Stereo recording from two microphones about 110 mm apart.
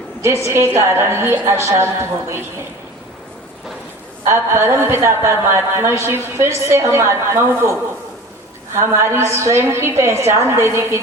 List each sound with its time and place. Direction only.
0.4 s speech: 25° right (ahead or behind)
4.3 s speech: 25° right (ahead or behind)